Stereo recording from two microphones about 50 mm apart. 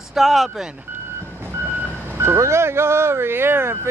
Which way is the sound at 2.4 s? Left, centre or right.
Right.